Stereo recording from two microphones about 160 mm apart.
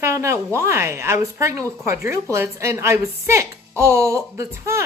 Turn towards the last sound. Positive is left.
turn(degrees=-20)  # may be behind; listen again after turning